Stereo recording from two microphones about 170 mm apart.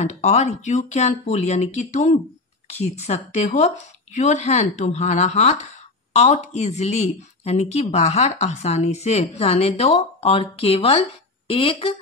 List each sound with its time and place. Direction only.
0.0 s a woman's voice: 40° left (ahead or behind)